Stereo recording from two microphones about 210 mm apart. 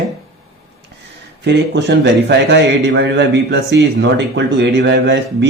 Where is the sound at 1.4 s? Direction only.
55° right (ahead or behind).